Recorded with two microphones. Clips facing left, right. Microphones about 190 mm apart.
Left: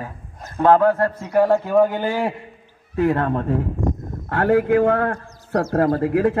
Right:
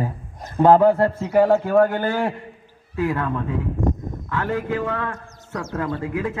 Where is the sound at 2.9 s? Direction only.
40° left (ahead or behind).